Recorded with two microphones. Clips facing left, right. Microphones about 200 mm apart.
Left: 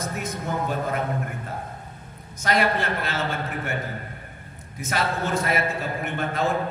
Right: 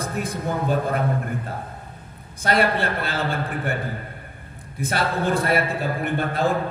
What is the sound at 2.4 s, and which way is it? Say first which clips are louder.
A man's voice: right 2 dB; 30° right (ahead or behind).